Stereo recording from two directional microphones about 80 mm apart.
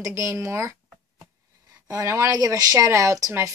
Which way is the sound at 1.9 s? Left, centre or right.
Right.